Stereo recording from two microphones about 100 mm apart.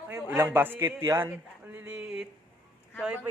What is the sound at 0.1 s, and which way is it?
A man's voice, 25° right (ahead or behind).